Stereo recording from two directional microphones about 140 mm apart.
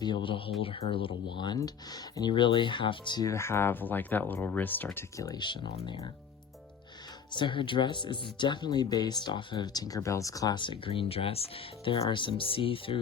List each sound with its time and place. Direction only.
0.0 s speech: 35° left (ahead or behind)
7.3 s speech: 35° left (ahead or behind)